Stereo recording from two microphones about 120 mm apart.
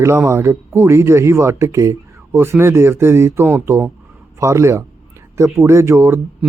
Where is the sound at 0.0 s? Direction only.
25° right (ahead or behind).